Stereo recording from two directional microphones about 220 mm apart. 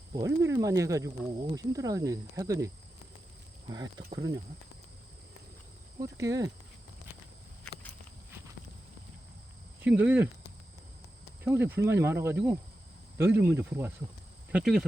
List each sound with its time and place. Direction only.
0.1 s speech: 15° right (ahead or behind)
3.7 s speech: 20° right (ahead or behind)
6.0 s speech: 15° right (ahead or behind)
9.8 s speech: 5° right (ahead or behind)
11.4 s speech: 10° right (ahead or behind)